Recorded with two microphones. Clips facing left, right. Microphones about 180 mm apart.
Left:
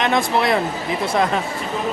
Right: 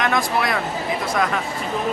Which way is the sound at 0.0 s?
25° left (ahead or behind).